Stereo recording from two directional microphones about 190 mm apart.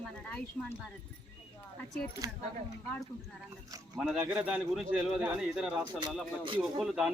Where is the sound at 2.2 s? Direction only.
20° right (ahead or behind).